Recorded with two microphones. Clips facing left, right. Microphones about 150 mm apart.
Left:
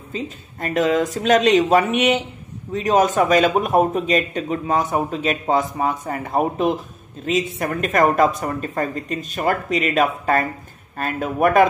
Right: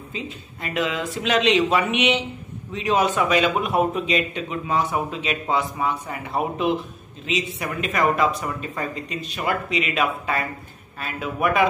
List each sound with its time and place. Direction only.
0.1 s a man's voice: 45° left (ahead or behind)